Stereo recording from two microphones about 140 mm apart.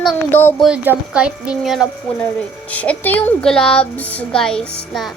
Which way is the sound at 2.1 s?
45° left (ahead or behind).